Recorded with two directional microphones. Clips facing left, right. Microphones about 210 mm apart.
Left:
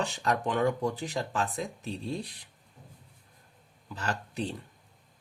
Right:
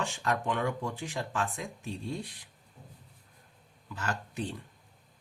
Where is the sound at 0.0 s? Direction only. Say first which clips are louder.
Left 2 dB; 35° left (ahead or behind).